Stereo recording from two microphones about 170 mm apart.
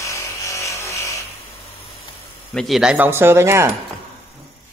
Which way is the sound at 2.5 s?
Centre (ahead or behind).